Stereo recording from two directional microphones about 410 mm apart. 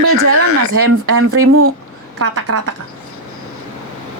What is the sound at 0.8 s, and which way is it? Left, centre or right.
A woman's voice, right.